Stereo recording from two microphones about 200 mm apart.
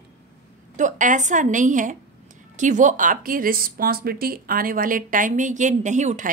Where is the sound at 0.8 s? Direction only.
40° right (ahead or behind).